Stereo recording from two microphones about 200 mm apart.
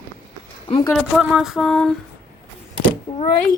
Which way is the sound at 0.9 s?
Centre (ahead or behind).